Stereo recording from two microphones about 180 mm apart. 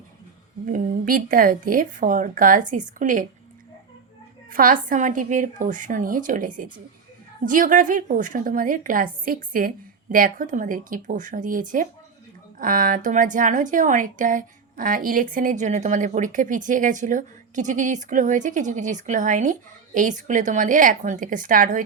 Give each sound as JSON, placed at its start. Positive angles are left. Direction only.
{"t": 0.7, "sound": "a woman's voice", "side_deg": -50}
{"t": 4.5, "sound": "a woman's voice", "side_deg": -50}